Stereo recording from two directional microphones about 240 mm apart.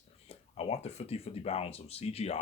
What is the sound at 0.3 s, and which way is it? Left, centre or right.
Speech, left.